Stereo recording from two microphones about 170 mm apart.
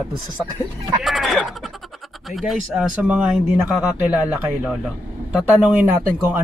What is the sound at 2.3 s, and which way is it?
Speech, centre (ahead or behind).